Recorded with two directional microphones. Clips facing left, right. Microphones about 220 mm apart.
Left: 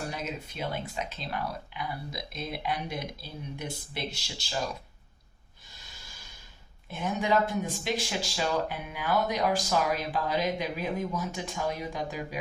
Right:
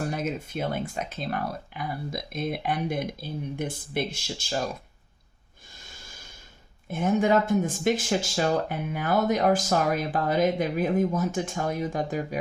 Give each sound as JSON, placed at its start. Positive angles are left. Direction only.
{"t": 0.1, "sound": "speech", "side_deg": -50}
{"t": 6.8, "sound": "speech", "side_deg": -50}